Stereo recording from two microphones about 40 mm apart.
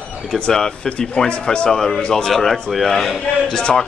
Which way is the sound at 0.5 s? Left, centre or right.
Centre.